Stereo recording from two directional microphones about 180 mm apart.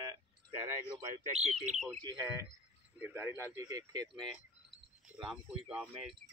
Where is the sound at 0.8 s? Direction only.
35° right (ahead or behind).